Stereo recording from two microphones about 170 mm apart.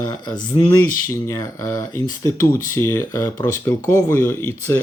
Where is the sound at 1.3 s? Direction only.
20° left (ahead or behind).